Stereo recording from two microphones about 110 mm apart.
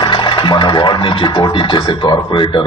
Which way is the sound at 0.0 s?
45° left (ahead or behind).